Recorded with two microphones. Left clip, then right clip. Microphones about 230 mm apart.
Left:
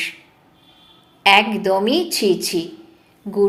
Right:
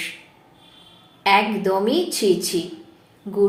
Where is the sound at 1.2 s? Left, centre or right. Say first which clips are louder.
Left 4 dB; left.